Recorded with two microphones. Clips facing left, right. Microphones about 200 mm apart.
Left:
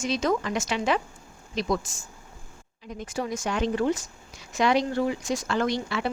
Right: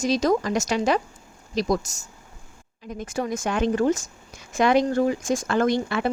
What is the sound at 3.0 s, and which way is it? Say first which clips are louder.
A woman's voice: right 3 dB; 50° right (ahead or behind).